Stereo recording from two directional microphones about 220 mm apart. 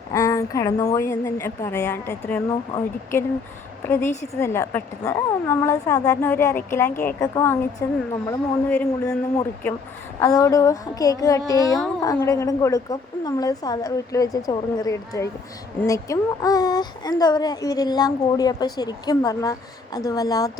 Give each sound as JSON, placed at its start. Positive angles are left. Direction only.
{"t": 0.1, "sound": "speech", "side_deg": 15}
{"t": 10.2, "sound": "speech", "side_deg": 15}